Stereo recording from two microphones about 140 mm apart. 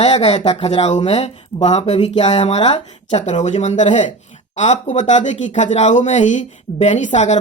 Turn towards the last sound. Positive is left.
turn(degrees=60)  # may be behind; listen again after turning